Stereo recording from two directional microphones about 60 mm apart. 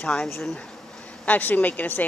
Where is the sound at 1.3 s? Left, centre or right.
Left.